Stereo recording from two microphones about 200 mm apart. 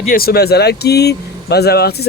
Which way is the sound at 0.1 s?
50° left (ahead or behind).